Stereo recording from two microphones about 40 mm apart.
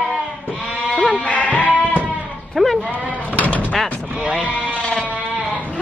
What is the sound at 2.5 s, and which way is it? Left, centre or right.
Sheep, centre.